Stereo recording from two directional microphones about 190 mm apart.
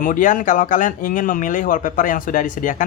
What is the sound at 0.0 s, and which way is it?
Speech, 45° left (ahead or behind).